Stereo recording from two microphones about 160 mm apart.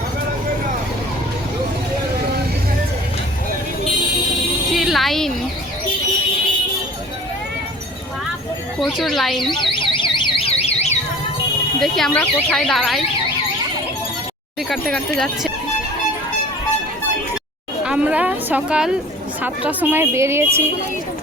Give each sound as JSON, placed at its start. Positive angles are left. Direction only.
{"t": 4.7, "sound": "music", "side_deg": 0}
{"t": 8.8, "sound": "speech", "side_deg": 0}
{"t": 9.5, "sound": "alarm", "side_deg": 30}
{"t": 11.8, "sound": "speech", "side_deg": 0}
{"t": 14.7, "sound": "speech", "side_deg": 0}
{"t": 17.8, "sound": "a sound", "side_deg": -5}
{"t": 19.4, "sound": "speech", "side_deg": -10}